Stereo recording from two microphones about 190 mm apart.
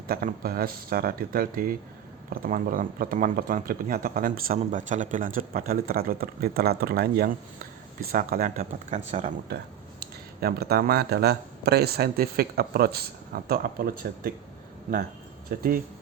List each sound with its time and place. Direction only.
0.1 s speech: 50° right (ahead or behind)
10.0 s speech: 55° right (ahead or behind)
15.4 s speech: 50° right (ahead or behind)